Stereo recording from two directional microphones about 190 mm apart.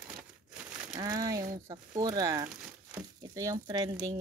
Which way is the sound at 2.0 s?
20° right (ahead or behind).